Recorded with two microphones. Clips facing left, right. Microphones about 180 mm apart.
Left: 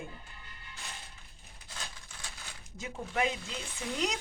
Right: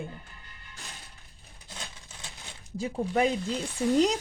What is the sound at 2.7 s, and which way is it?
Speech, 35° right (ahead or behind).